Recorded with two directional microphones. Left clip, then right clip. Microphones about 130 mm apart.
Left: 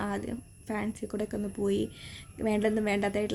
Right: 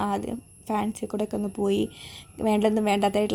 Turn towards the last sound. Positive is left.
turn(degrees=-45)  # may be behind; listen again after turning